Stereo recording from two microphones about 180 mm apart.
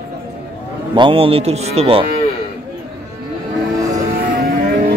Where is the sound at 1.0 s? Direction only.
30° right (ahead or behind).